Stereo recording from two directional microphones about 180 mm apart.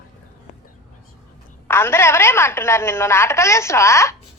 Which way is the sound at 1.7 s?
15° left (ahead or behind).